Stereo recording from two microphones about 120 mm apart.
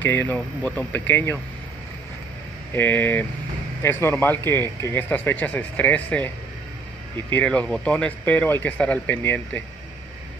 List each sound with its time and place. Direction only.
0.0 s speech: 15° left (ahead or behind)
2.7 s speech: 15° left (ahead or behind)